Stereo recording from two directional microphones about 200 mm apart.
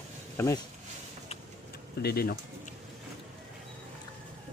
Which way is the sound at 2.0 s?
50° left (ahead or behind).